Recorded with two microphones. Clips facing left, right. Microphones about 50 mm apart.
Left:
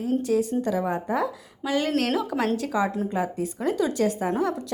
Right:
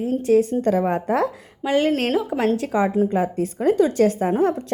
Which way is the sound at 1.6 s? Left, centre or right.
Right.